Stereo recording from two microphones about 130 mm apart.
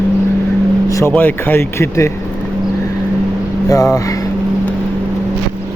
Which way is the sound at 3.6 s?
25° left (ahead or behind).